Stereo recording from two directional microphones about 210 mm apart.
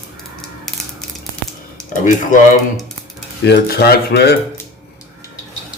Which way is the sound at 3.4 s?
50° left (ahead or behind).